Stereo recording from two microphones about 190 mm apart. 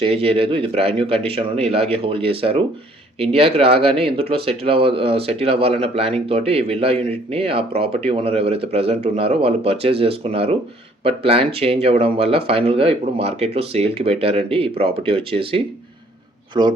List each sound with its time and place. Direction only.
0.0 s speech: 30° right (ahead or behind)